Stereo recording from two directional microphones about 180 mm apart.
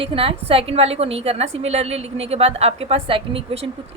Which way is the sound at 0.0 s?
30° right (ahead or behind).